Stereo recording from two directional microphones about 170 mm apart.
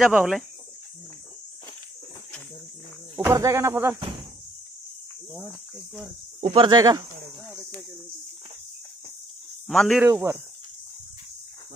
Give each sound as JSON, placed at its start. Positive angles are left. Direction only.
{"t": 0.0, "sound": "speech", "side_deg": -5}
{"t": 3.2, "sound": "speech", "side_deg": -15}
{"t": 5.5, "sound": "speech", "side_deg": 0}
{"t": 6.4, "sound": "speech", "side_deg": -30}
{"t": 9.7, "sound": "speech", "side_deg": 0}
{"t": 10.0, "sound": "speech", "side_deg": -15}